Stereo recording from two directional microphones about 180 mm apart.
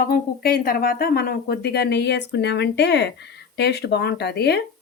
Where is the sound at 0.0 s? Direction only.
55° left (ahead or behind).